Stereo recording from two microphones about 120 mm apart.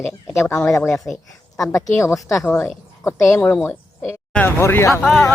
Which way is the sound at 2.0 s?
25° left (ahead or behind).